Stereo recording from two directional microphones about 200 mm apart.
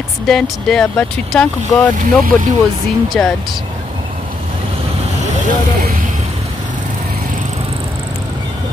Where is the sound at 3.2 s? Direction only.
5° left (ahead or behind).